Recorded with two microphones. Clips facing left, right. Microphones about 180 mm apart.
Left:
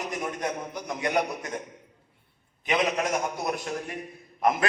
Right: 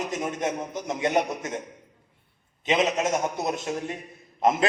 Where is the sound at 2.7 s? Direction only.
20° right (ahead or behind).